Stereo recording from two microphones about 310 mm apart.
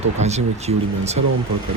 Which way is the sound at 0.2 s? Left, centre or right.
Right.